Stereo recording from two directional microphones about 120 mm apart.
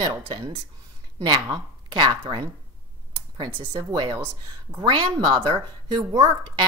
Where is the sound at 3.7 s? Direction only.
30° right (ahead or behind).